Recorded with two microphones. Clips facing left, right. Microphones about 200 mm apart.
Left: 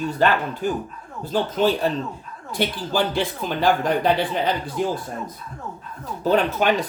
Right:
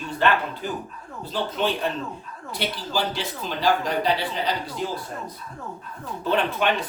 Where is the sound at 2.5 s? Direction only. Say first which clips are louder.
Left 5 dB; 55° left (ahead or behind).